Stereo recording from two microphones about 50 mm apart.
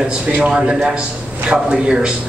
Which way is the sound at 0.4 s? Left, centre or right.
Right.